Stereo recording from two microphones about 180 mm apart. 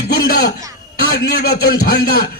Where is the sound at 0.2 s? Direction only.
60° left (ahead or behind).